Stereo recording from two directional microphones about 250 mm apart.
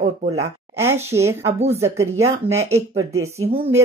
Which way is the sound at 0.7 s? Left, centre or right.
Centre.